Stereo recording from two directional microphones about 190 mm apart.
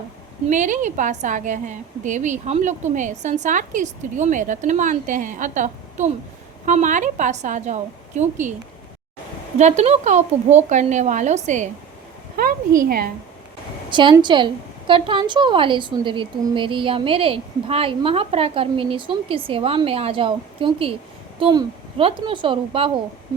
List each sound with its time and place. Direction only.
0.4 s a woman's voice: 40° right (ahead or behind)
9.6 s a woman's voice: 35° right (ahead or behind)
12.4 s a sound: 55° right (ahead or behind)
13.9 s a woman's voice: 25° right (ahead or behind)